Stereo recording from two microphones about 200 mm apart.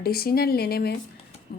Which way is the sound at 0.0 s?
50° left (ahead or behind).